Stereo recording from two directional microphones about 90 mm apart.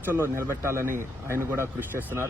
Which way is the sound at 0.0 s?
25° right (ahead or behind).